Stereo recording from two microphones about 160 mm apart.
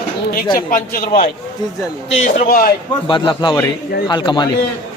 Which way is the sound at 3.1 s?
30° left (ahead or behind).